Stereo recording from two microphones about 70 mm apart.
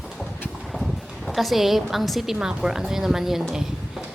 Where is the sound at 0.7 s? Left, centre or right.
Centre.